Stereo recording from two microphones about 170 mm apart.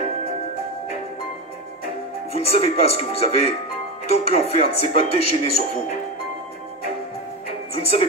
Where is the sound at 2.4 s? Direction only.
35° left (ahead or behind).